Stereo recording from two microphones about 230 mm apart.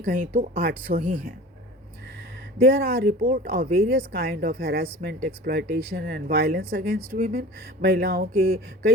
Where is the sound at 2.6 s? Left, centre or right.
Right.